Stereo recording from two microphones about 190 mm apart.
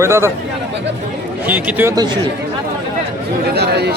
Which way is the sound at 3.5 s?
60° right (ahead or behind).